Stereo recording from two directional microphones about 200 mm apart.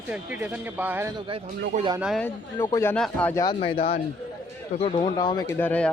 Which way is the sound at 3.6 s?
30° left (ahead or behind).